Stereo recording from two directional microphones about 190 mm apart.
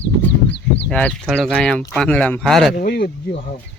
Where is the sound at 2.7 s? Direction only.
50° left (ahead or behind).